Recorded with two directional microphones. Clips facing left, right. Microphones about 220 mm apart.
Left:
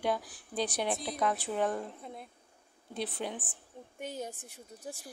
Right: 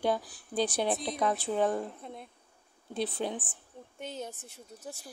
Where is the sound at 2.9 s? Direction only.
30° right (ahead or behind).